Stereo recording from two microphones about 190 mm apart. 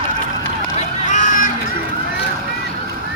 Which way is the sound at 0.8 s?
40° left (ahead or behind).